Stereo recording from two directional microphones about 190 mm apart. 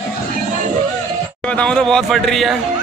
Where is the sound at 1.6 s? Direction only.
5° left (ahead or behind).